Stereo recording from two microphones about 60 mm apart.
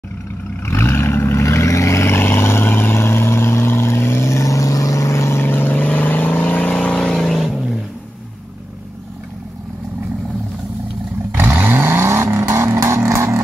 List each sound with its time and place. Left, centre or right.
0.7 s vehicle: left
5.4 s vehicle: left; by 7.2 s centre
7.2 s vehicle: centre
11.4 s vehicle: right